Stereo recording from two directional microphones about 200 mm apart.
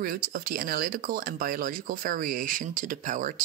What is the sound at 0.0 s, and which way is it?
Speech, 45° right (ahead or behind).